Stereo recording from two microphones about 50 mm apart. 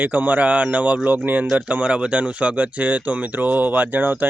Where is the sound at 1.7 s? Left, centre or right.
Right.